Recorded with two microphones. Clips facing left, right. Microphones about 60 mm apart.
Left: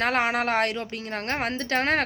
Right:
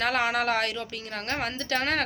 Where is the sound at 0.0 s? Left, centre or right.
Left.